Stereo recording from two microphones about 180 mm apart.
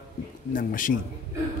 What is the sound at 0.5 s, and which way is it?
Speech, 50° left (ahead or behind).